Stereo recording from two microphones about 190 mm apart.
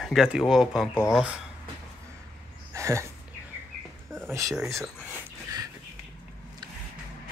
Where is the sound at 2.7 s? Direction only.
15° right (ahead or behind).